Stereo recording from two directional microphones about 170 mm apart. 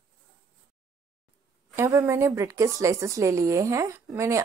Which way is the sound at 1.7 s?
15° right (ahead or behind).